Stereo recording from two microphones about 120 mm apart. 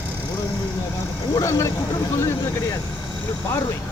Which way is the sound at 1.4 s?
25° left (ahead or behind).